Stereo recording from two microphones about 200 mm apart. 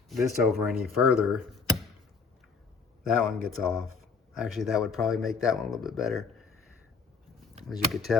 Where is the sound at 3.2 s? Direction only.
Centre (ahead or behind).